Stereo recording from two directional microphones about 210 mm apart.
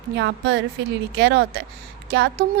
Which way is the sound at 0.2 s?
55° right (ahead or behind).